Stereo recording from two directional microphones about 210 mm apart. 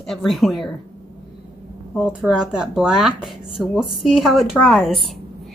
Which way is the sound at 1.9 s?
Centre (ahead or behind).